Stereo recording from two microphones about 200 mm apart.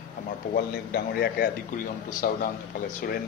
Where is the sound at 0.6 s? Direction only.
50° left (ahead or behind).